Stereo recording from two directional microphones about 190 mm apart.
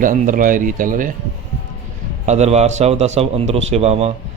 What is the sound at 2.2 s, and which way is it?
Speech, 35° right (ahead or behind).